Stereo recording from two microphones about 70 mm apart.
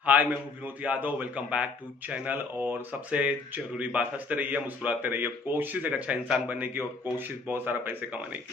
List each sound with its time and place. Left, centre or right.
0.0 s a man's voice: right